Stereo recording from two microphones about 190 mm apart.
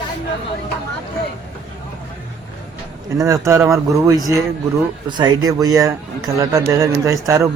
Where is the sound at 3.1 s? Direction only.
15° right (ahead or behind).